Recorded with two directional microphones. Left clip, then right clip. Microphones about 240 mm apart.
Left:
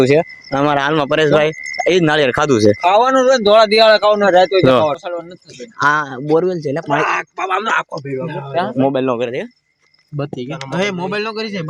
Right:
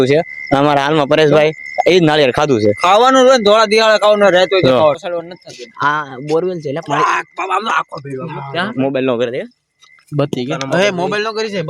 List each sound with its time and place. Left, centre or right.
0.0 s a man's voice: centre
0.5 s speech: centre
2.8 s speech: right
3.4 s a man's voice: centre; by 5.2 s right
5.8 s a man's voice: centre
6.8 s speech: centre
8.3 s speech: right
8.7 s a man's voice: centre
9.0 s speech: centre
10.2 s speech: right